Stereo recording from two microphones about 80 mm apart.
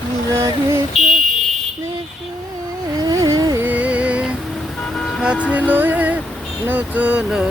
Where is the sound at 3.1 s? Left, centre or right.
Right.